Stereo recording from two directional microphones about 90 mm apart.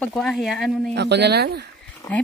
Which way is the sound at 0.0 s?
5° left (ahead or behind).